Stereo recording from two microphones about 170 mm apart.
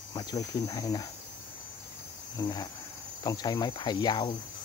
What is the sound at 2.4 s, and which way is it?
Cricket, 20° left (ahead or behind).